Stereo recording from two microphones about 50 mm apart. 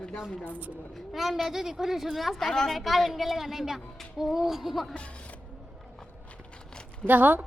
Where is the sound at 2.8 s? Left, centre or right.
Centre.